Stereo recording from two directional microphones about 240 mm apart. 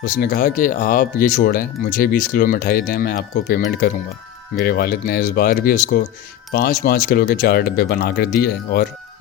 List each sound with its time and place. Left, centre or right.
0.0 s speech: left